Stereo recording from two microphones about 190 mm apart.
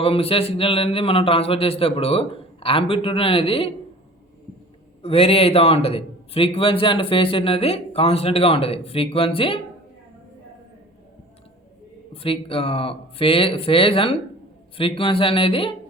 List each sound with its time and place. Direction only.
0.0 s a man's voice: 30° left (ahead or behind)
5.0 s a man's voice: 30° left (ahead or behind)
12.1 s a man's voice: 30° left (ahead or behind)